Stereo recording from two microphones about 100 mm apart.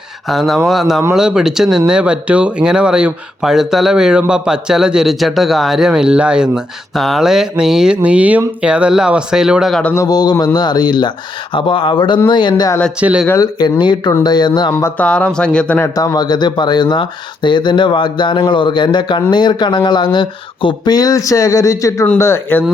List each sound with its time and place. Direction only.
0.3 s a man's voice: centre (ahead or behind)
9.9 s speech: 35° left (ahead or behind)
11.5 s speech: 60° left (ahead or behind)
13.0 s a man's voice: 10° right (ahead or behind)
13.4 s speech: 45° left (ahead or behind)
14.7 s speech: 25° left (ahead or behind)
14.9 s speech: 10° left (ahead or behind)
16.0 s speech: 40° left (ahead or behind)
20.9 s speech: 40° left (ahead or behind); by 22.6 s 25° left (ahead or behind)